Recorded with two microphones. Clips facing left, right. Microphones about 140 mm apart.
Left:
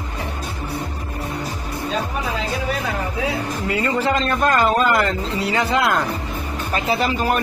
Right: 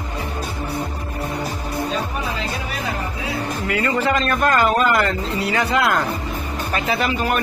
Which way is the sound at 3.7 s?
25° left (ahead or behind).